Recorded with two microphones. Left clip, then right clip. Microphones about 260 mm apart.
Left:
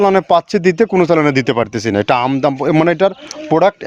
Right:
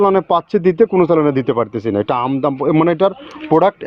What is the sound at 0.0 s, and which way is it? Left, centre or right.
Speech, left.